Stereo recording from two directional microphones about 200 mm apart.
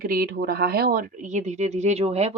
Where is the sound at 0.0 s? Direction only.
45° right (ahead or behind).